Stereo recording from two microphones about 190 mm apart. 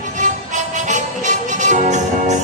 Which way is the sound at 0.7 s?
40° right (ahead or behind).